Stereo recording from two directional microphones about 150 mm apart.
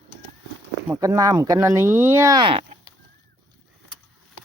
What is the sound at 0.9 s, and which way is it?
Speech, 20° right (ahead or behind).